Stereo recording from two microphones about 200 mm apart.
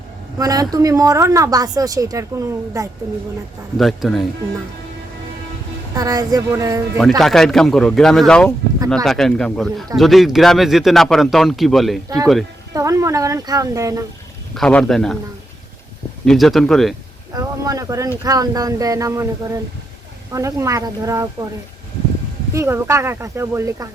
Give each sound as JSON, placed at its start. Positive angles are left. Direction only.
{"t": 0.3, "sound": "speech", "side_deg": -20}
{"t": 3.8, "sound": "speech", "side_deg": 0}
{"t": 5.9, "sound": "speech", "side_deg": -20}
{"t": 7.2, "sound": "speech", "side_deg": 0}
{"t": 12.0, "sound": "speech", "side_deg": -15}
{"t": 14.5, "sound": "speech", "side_deg": 5}
{"t": 16.2, "sound": "speech", "side_deg": 0}
{"t": 17.3, "sound": "speech", "side_deg": -15}
{"t": 22.5, "sound": "speech", "side_deg": -15}